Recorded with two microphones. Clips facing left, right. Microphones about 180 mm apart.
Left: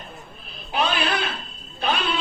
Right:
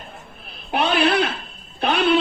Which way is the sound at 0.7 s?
65° right (ahead or behind).